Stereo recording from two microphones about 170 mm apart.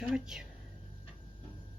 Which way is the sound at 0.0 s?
5° right (ahead or behind).